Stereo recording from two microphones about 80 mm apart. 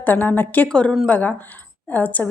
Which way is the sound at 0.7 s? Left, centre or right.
Centre.